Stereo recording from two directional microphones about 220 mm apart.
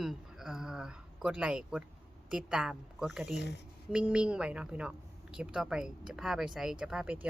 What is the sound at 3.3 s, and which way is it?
Speech, 50° left (ahead or behind).